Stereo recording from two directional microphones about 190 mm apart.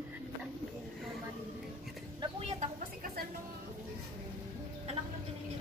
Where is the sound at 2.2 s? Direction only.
35° right (ahead or behind).